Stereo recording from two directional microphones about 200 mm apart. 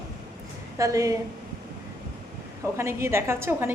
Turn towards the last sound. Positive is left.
turn(degrees=-10)  # may be behind; listen again after turning